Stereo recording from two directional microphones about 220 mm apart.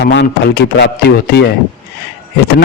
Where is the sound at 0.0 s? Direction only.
50° left (ahead or behind).